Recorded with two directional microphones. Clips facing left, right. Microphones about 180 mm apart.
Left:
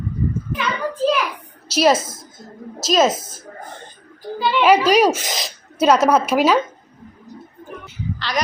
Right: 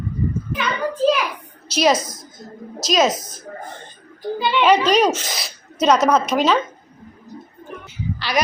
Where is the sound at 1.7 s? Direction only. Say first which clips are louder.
Left 2 dB; 5° left (ahead or behind).